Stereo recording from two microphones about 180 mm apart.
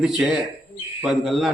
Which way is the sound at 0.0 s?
Centre (ahead or behind).